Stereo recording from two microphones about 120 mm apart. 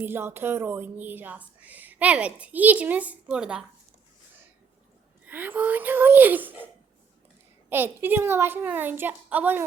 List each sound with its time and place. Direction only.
0.0 s speech: 20° right (ahead or behind)
5.2 s speech: 15° right (ahead or behind)
7.7 s speech: 15° right (ahead or behind)